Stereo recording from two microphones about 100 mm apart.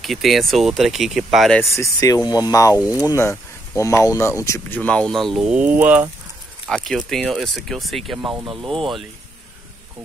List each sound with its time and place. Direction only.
0.0 s speech: centre (ahead or behind)
1.6 s speech: 30° left (ahead or behind)
4.7 s speech: 10° left (ahead or behind)
5.5 s speech: 15° right (ahead or behind)
6.7 s speech: 5° left (ahead or behind)